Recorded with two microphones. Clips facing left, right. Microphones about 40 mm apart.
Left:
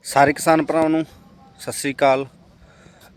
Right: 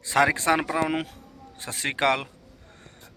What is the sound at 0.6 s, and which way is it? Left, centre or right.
Speech, centre.